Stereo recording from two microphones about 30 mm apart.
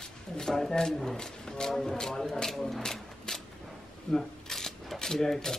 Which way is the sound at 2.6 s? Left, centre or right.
Centre.